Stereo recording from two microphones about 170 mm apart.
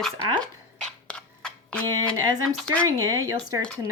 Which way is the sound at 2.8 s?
20° right (ahead or behind).